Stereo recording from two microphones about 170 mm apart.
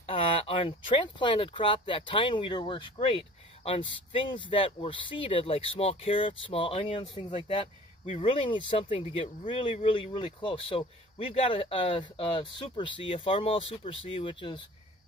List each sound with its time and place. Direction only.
0.0 s speech: 35° left (ahead or behind)